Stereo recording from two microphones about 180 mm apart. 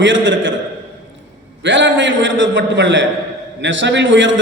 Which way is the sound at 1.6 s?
90° right.